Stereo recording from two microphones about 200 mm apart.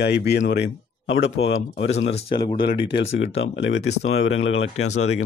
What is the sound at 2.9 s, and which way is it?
Speech, 70° left (ahead or behind).